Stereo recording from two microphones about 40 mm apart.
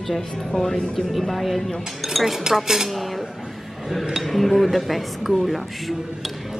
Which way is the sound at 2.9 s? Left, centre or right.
Centre.